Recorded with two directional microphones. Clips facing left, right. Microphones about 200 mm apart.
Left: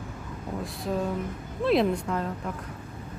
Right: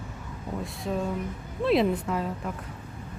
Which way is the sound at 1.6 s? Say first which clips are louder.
Even; centre (ahead or behind).